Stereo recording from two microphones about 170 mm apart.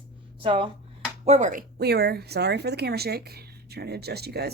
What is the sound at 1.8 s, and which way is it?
Speech, 70° right (ahead or behind).